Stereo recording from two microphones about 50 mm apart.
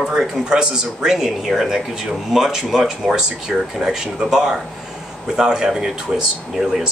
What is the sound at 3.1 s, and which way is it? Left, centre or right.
Speech, centre.